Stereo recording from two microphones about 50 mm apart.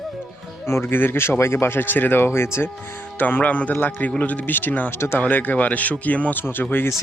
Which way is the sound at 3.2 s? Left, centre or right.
Left.